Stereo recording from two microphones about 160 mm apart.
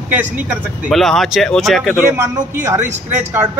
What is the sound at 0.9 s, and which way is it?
Speech, centre (ahead or behind).